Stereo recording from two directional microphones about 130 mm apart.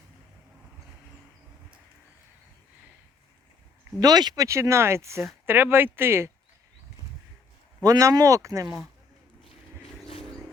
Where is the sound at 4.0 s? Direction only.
30° right (ahead or behind).